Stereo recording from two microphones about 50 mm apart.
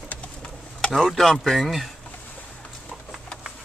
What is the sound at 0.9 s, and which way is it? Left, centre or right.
Speech, centre.